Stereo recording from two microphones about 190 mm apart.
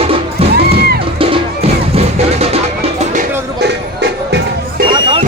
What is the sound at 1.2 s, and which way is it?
Music, 30° right (ahead or behind).